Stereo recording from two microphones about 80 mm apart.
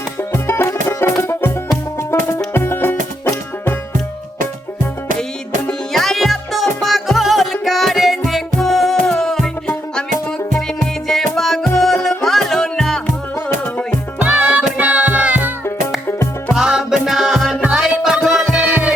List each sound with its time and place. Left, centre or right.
0.2 s music: left
5.9 s music: centre
11.1 s music: centre
14.2 s music: centre
16.0 s music: left
16.5 s music: centre
17.6 s music: centre
18.6 s music: centre